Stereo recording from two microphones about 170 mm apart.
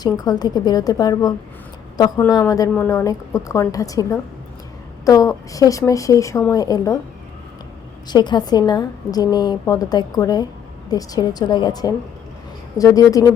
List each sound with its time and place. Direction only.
0.0 s a woman's voice: 20° left (ahead or behind)
8.0 s a woman's voice: 25° left (ahead or behind)